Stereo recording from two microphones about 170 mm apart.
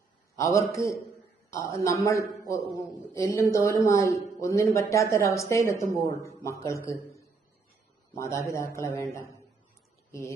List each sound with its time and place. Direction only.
0.3 s speech: 15° left (ahead or behind)